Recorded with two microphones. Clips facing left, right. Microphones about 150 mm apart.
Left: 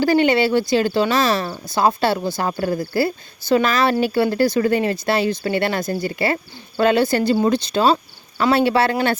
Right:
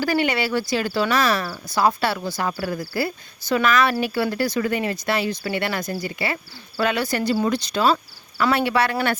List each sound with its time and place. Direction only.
0.0 s speech: 25° left (ahead or behind)
6.7 s speech: 30° left (ahead or behind)